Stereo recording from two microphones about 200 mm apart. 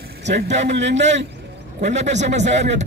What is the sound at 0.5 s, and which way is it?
Speech, 35° right (ahead or behind).